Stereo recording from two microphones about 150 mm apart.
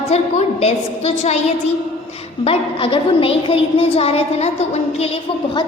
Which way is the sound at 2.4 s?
40° left (ahead or behind).